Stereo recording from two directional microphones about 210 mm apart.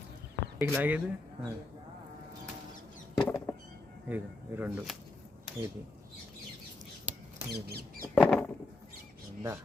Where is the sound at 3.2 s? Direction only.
10° left (ahead or behind).